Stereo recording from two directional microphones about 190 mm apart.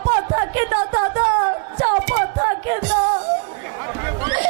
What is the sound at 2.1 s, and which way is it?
Music, 20° right (ahead or behind).